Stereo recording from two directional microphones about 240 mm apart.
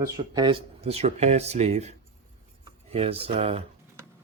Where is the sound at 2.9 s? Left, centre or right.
Right.